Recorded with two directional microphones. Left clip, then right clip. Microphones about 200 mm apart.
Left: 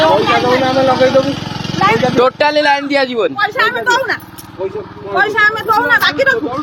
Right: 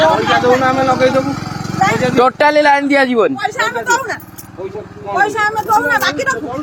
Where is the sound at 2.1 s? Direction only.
50° right (ahead or behind).